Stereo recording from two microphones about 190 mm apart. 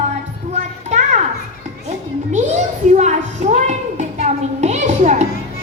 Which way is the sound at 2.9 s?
35° right (ahead or behind).